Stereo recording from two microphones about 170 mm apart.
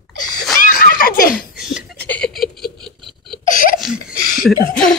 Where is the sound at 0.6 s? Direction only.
55° left (ahead or behind).